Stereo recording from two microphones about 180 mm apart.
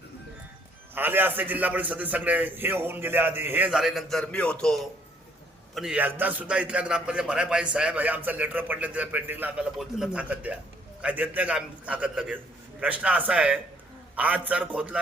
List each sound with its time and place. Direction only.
0.9 s a man's voice: 10° right (ahead or behind)